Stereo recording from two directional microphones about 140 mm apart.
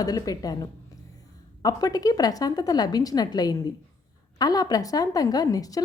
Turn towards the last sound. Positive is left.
turn(degrees=25)  # may be behind; listen again after turning